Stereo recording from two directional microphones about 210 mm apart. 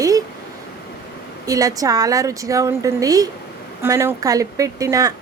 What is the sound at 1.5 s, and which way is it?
Speech, 15° right (ahead or behind).